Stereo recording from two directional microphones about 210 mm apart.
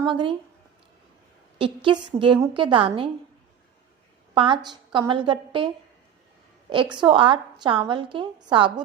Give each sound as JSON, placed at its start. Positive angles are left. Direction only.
{"t": 0.0, "sound": "a woman's voice", "side_deg": -25}
{"t": 1.5, "sound": "a woman's voice", "side_deg": -25}
{"t": 4.4, "sound": "a woman's voice", "side_deg": -20}